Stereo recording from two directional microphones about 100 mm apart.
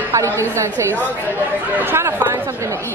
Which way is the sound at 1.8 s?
25° right (ahead or behind).